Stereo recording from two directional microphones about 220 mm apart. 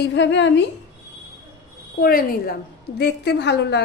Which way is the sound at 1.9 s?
45° left (ahead or behind).